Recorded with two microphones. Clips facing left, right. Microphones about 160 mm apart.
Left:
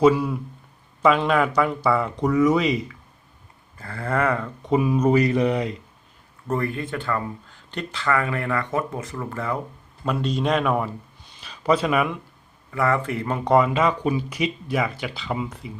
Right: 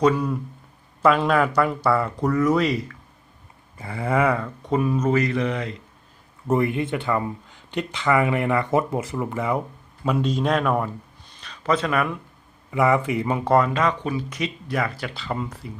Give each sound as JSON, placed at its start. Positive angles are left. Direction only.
{"t": 0.0, "sound": "speech", "side_deg": 5}
{"t": 3.8, "sound": "speech", "side_deg": -15}
{"t": 6.5, "sound": "speech", "side_deg": -15}
{"t": 9.2, "sound": "speech", "side_deg": -15}
{"t": 12.7, "sound": "speech", "side_deg": -15}
{"t": 13.7, "sound": "speech", "side_deg": 10}